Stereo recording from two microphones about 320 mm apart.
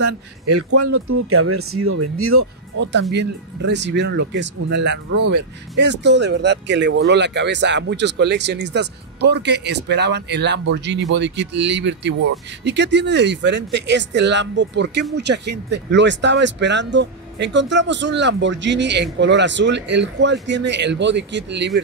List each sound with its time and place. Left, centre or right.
0.6 s speech: right